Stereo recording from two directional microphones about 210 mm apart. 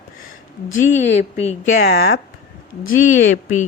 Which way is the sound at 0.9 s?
35° left (ahead or behind).